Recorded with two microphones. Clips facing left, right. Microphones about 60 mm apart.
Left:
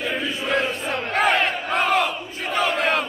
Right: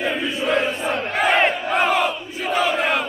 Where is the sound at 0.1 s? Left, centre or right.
Centre.